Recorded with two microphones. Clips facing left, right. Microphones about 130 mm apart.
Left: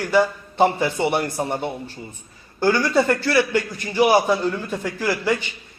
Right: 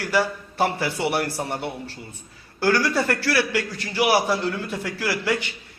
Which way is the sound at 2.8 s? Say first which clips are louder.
Left 4 dB; 15° left (ahead or behind).